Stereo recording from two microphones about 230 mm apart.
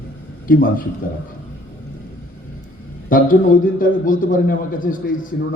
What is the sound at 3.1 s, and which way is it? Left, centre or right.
A man's voice, left.